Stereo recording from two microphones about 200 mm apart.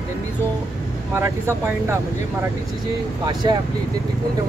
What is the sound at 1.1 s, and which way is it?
Speech, 10° right (ahead or behind).